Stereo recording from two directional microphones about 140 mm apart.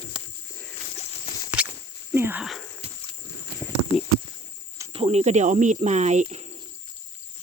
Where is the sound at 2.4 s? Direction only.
Centre (ahead or behind).